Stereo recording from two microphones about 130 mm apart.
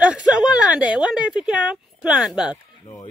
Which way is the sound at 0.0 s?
5° right (ahead or behind).